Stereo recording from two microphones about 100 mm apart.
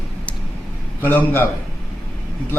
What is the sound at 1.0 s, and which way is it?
Speech, 20° left (ahead or behind).